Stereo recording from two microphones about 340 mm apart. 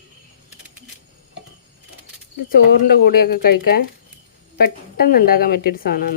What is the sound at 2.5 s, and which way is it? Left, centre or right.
A woman's voice, left.